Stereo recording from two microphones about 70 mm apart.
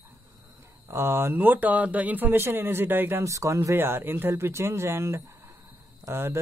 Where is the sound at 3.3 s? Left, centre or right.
Right.